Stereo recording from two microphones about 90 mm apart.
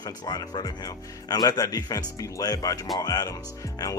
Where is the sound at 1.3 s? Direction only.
45° left (ahead or behind).